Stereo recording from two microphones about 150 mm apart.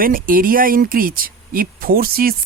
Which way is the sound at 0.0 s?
70° right (ahead or behind).